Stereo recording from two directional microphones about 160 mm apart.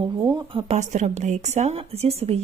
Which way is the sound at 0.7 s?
45° right (ahead or behind).